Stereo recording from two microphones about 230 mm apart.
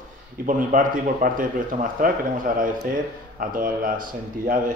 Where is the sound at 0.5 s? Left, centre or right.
Right.